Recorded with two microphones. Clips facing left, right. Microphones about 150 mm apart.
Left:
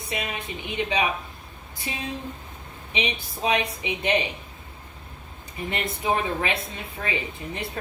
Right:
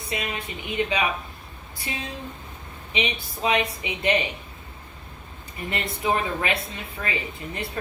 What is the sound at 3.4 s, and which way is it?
Speech, 20° left (ahead or behind).